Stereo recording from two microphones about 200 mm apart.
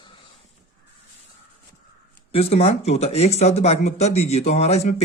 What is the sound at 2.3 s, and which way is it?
Speech, 30° left (ahead or behind).